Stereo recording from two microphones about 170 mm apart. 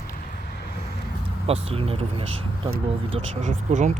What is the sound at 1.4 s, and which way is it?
Speech, 35° right (ahead or behind).